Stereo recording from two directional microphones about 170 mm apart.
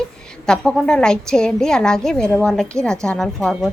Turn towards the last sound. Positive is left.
turn(degrees=0)  # may be behind; listen again after turning